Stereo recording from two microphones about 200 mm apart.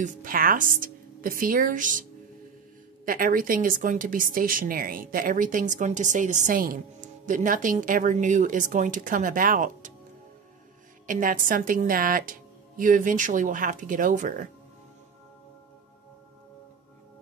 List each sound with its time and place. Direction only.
0.0 s a woman's voice: 45° right (ahead or behind)
3.1 s speech: 45° right (ahead or behind)
11.1 s a woman's voice: 40° right (ahead or behind)